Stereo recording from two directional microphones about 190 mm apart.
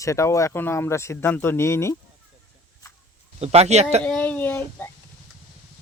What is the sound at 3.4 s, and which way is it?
Speech, 35° right (ahead or behind).